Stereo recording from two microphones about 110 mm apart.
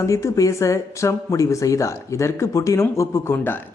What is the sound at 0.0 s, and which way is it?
Speech, 30° left (ahead or behind).